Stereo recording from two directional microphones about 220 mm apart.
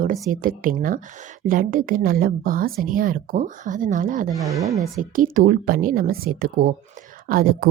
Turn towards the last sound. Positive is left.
turn(degrees=-40)  # may be behind; listen again after turning